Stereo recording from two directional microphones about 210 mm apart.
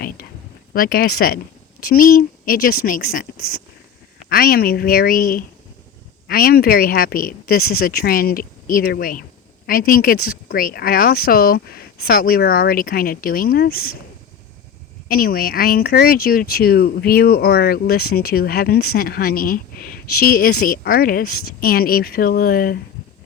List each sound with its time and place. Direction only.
0.7 s speech: 45° left (ahead or behind)
15.0 s speech: 45° left (ahead or behind)